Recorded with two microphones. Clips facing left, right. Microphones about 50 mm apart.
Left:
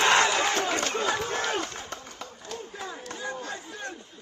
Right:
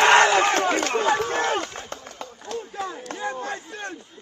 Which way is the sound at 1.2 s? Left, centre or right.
Right.